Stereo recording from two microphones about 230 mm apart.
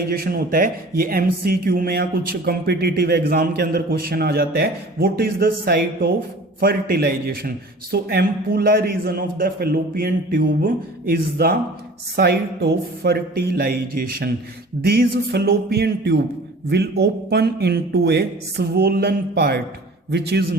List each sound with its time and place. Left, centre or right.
0.1 s speech: right
14.8 s speech: right